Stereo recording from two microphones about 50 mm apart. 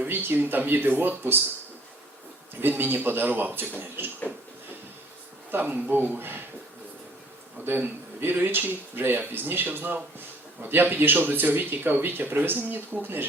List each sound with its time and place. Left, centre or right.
0.1 s speech: right
2.6 s speech: right
5.5 s speech: right
7.6 s speech: right